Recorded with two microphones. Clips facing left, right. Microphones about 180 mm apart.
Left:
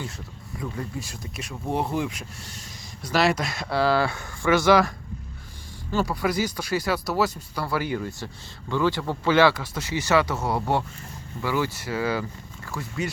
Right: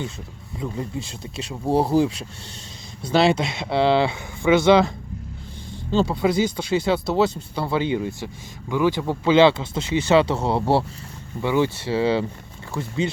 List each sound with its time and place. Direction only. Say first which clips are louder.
0.6 s speech: right 4 dB; 25° right (ahead or behind)
5.9 s speech: right 5 dB; 25° right (ahead or behind)